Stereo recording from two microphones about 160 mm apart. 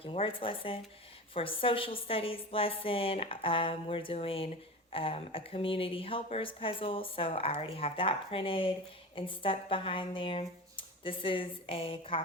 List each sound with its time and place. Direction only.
0.0 s speech: 35° left (ahead or behind)